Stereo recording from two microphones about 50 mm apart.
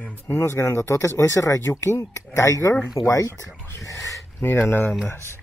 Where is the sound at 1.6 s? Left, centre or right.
Left.